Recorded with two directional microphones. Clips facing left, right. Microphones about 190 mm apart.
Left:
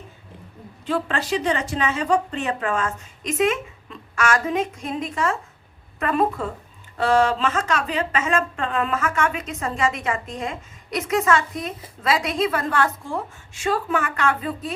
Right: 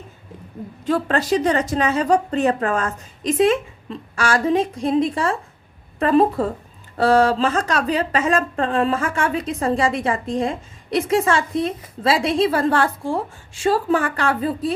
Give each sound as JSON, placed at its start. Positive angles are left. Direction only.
{"t": 0.9, "sound": "speech", "side_deg": -40}